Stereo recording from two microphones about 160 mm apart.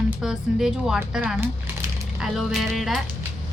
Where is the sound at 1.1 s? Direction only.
10° right (ahead or behind).